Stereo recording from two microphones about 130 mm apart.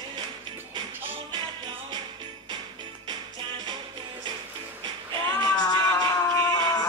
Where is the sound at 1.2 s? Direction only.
35° right (ahead or behind).